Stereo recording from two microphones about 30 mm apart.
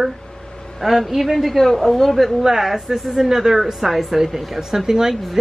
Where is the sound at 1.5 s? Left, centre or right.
Centre.